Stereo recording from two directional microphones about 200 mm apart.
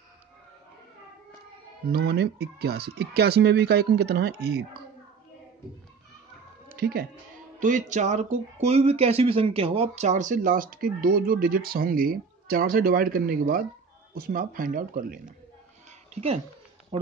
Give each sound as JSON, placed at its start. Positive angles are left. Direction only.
{"t": 1.9, "sound": "speech", "side_deg": -55}
{"t": 6.7, "sound": "speech", "side_deg": -50}
{"t": 7.6, "sound": "speech", "side_deg": -40}
{"t": 16.1, "sound": "speech", "side_deg": -30}